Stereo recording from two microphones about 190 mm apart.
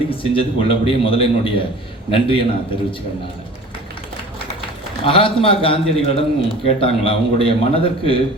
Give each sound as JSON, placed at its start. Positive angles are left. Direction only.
{"t": 0.1, "sound": "a man's voice", "side_deg": 30}
{"t": 5.0, "sound": "a man's voice", "side_deg": 30}